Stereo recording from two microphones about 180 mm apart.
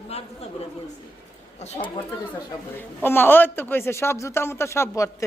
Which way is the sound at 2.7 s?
10° left (ahead or behind).